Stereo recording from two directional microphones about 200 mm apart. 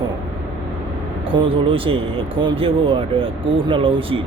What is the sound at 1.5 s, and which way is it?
Speech, 25° right (ahead or behind).